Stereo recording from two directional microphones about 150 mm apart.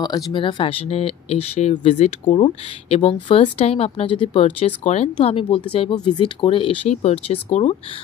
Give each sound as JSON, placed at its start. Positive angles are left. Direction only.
{"t": 0.0, "sound": "a woman's voice", "side_deg": 30}